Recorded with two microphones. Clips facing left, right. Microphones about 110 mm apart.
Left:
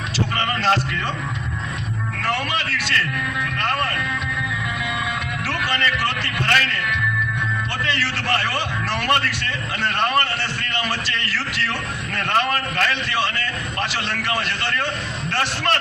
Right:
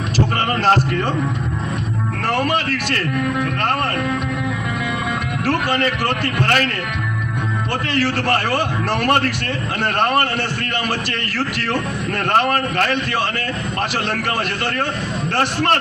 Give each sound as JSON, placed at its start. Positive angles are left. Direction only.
{"t": 0.3, "sound": "a sound", "side_deg": -45}
{"t": 2.2, "sound": "a man's voice", "side_deg": -45}
{"t": 5.5, "sound": "a man's voice", "side_deg": -50}
{"t": 7.9, "sound": "a man's voice", "side_deg": -50}